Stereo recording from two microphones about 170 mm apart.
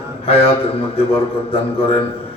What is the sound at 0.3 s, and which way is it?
Speech, 35° left (ahead or behind).